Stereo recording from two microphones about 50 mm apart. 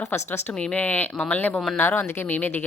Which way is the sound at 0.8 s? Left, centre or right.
Left.